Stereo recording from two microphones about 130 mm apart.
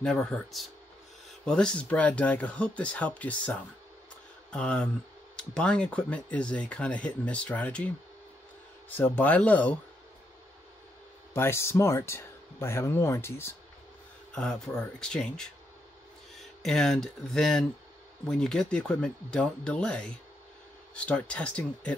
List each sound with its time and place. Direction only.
0.0 s speech: 5° left (ahead or behind)
8.9 s speech: 15° left (ahead or behind)
11.3 s speech: 20° left (ahead or behind)
14.3 s speech: 5° left (ahead or behind)
16.6 s speech: 5° left (ahead or behind)